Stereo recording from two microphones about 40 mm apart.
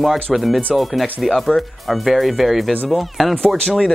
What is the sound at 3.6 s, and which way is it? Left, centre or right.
Speech, centre.